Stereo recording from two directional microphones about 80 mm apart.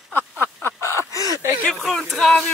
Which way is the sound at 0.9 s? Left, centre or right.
Right.